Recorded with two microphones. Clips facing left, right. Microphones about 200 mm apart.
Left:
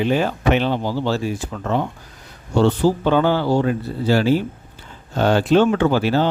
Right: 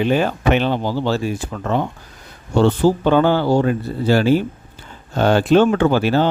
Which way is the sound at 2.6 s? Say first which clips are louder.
Right 2 dB; 50° right (ahead or behind).